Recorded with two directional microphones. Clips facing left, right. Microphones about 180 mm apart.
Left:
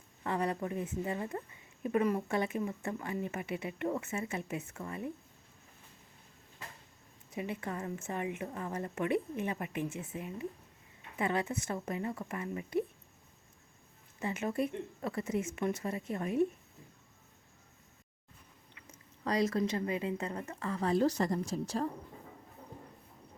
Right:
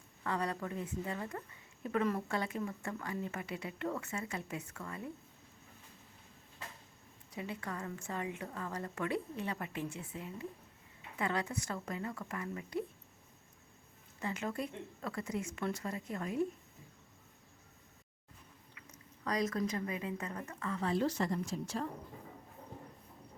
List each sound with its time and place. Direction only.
0.2 s speech: 20° left (ahead or behind)
7.3 s speech: 20° left (ahead or behind)
14.2 s speech: 20° left (ahead or behind)
19.2 s a woman's voice: 30° left (ahead or behind)